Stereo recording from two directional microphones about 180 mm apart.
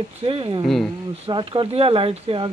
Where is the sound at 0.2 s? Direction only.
30° right (ahead or behind).